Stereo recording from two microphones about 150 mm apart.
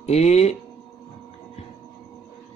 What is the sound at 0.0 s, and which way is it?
Speech, 45° left (ahead or behind).